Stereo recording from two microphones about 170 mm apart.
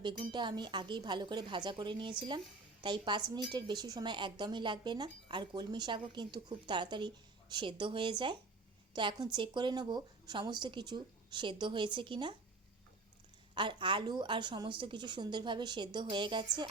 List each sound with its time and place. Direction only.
0.0 s a woman's voice: 25° right (ahead or behind)
13.5 s a woman's voice: 30° right (ahead or behind)